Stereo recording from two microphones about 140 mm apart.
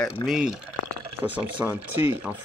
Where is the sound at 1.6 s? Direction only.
15° right (ahead or behind).